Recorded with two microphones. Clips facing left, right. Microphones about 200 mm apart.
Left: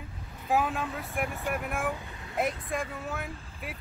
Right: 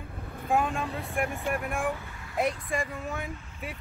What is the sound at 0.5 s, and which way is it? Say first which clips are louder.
Speech: right 1 dB; 5° left (ahead or behind).